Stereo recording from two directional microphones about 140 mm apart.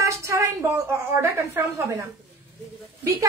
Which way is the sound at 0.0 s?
20° right (ahead or behind).